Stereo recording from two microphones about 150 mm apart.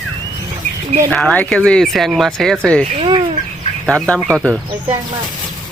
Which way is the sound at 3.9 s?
5° left (ahead or behind).